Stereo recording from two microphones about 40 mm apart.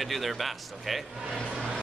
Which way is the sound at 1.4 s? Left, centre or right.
Centre.